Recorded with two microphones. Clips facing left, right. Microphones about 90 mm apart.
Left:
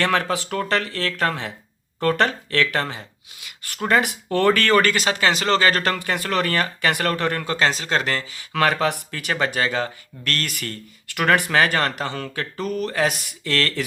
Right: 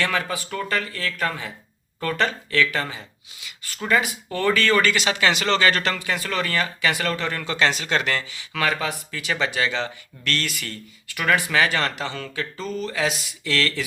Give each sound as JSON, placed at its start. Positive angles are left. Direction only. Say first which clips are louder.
{"t": 0.0, "sound": "speech", "louder": "left 4 dB", "side_deg": 60}
{"t": 9.3, "sound": "speech", "louder": "left 2 dB", "side_deg": 40}